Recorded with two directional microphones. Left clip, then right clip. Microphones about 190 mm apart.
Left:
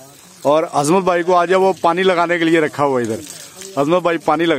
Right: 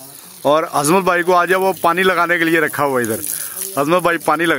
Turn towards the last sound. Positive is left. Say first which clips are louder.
# even
turn(degrees=0)  # may be behind; listen again after turning